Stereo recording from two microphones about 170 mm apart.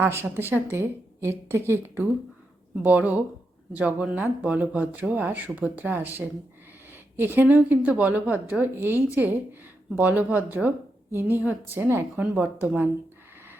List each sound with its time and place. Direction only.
0.0 s speech: 15° right (ahead or behind)